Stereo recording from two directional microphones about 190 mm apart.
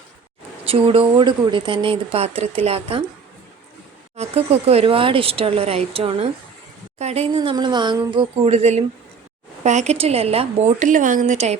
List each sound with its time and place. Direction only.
0.6 s speech: 30° right (ahead or behind)
4.2 s a woman's voice: 35° right (ahead or behind)